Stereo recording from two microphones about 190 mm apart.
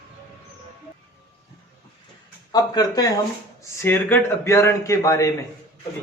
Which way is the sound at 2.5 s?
20° left (ahead or behind).